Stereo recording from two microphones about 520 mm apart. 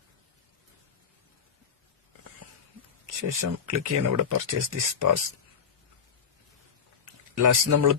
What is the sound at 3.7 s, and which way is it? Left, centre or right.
Speech, right.